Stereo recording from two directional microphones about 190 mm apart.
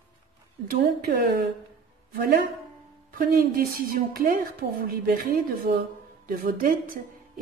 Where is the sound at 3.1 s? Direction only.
50° right (ahead or behind).